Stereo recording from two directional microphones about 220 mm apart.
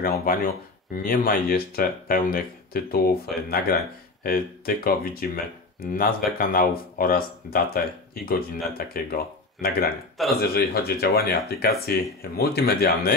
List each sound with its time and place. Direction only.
0.3 s speech: 40° left (ahead or behind)
10.2 s a man's voice: centre (ahead or behind)
10.5 s speech: 45° left (ahead or behind)